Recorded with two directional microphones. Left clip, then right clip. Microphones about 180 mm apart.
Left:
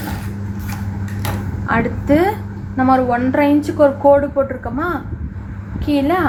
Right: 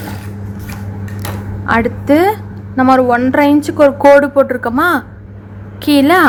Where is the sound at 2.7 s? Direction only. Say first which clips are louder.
Right 5 dB; 50° right (ahead or behind).